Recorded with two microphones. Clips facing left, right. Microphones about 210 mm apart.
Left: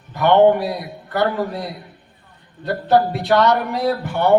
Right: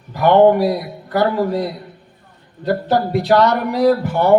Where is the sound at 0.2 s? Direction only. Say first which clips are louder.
Right 2 dB; 40° right (ahead or behind).